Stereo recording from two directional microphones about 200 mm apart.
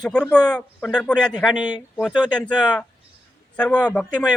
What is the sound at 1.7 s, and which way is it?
Speech, 20° left (ahead or behind).